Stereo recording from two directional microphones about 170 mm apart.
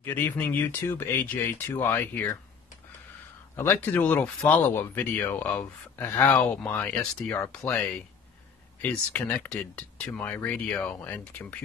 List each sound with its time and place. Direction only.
0.0 s speech: 10° left (ahead or behind)
3.5 s speech: 10° left (ahead or behind)